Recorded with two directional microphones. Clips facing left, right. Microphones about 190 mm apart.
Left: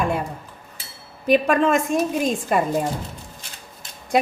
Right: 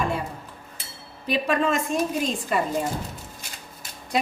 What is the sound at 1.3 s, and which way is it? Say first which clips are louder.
A woman's voice: left 6 dB; 50° left (ahead or behind).